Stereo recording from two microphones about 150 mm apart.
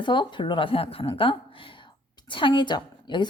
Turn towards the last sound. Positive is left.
turn(degrees=30)  # may be behind; listen again after turning